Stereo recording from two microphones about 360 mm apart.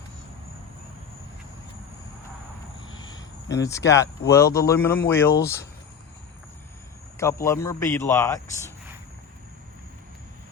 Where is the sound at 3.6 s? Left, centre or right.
Centre.